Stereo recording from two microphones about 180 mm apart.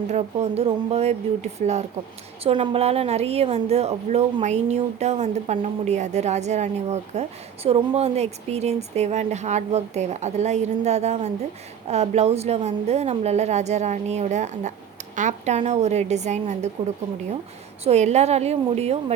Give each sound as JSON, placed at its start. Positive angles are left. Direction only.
{"t": 0.1, "sound": "a woman's voice", "side_deg": -35}
{"t": 17.8, "sound": "a woman's voice", "side_deg": -40}